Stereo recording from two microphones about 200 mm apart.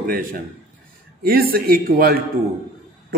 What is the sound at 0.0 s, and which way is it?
A woman's voice, 45° right (ahead or behind).